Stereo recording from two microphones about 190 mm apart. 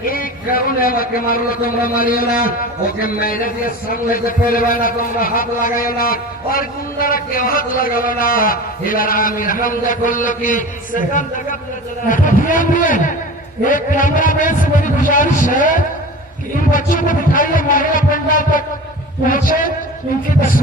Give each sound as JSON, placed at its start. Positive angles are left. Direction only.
{"t": 0.0, "sound": "a man's voice", "side_deg": 50}